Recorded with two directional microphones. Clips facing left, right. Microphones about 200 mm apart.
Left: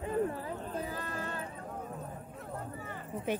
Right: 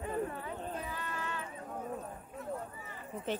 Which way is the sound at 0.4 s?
35° left (ahead or behind).